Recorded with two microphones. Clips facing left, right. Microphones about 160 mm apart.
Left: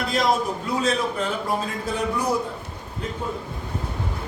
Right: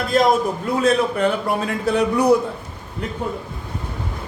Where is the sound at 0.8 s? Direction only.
60° right (ahead or behind).